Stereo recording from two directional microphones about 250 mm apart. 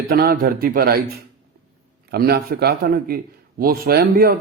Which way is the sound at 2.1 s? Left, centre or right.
Right.